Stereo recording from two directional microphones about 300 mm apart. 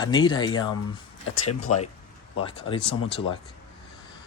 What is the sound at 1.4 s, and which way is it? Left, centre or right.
Speech, left.